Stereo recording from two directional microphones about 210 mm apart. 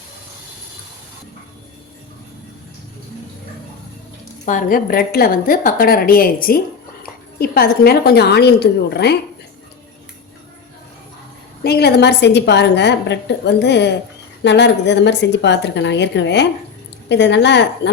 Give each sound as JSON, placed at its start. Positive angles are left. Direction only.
{"t": 4.4, "sound": "a woman's voice", "side_deg": 40}
{"t": 11.6, "sound": "a woman's voice", "side_deg": 50}